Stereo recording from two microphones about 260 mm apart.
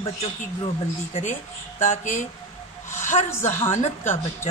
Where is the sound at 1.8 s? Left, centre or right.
Left.